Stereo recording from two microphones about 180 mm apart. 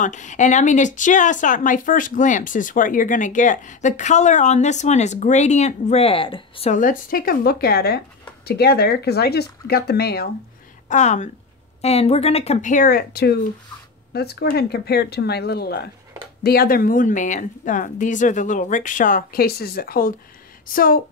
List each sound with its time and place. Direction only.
0.0 s speech: 45° left (ahead or behind)
6.7 s speech: 45° left (ahead or behind)
10.9 s speech: 40° left (ahead or behind)